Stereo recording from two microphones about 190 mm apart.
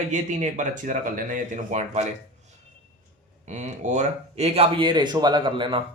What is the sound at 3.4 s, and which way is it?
Speech, 40° right (ahead or behind).